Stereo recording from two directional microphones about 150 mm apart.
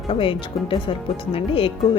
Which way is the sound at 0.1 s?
35° left (ahead or behind).